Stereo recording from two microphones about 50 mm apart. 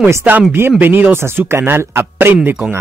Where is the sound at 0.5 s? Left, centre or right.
Right.